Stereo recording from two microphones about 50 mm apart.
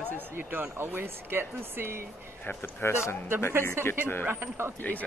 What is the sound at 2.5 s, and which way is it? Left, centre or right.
Speech, left.